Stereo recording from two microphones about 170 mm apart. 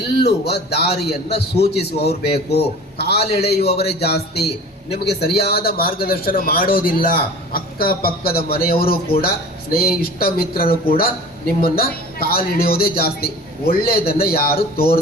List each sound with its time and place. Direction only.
0.2 s a man's voice: 70° left (ahead or behind)